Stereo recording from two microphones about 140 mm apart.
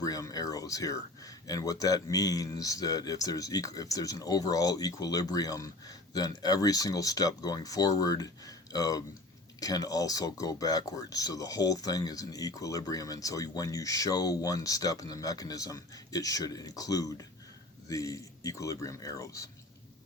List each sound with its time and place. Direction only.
0.0 s speech: 25° left (ahead or behind)